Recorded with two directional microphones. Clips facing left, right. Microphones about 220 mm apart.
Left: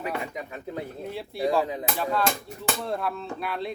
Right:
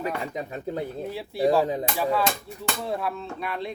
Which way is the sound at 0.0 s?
35° right (ahead or behind).